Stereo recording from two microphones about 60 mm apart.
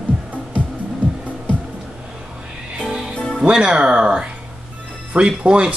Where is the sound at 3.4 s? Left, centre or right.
Centre.